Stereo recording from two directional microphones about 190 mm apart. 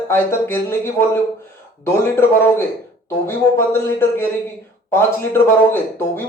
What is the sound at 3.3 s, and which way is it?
Speech, 10° left (ahead or behind).